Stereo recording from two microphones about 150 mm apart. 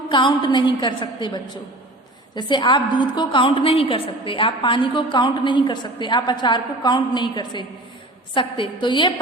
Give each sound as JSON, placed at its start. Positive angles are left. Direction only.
{"t": 0.1, "sound": "a woman's voice", "side_deg": 30}